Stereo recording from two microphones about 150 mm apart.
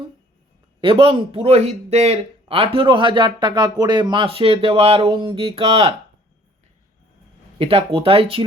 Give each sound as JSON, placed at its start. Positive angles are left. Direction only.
{"t": 0.8, "sound": "speech", "side_deg": -35}
{"t": 7.6, "sound": "speech", "side_deg": -40}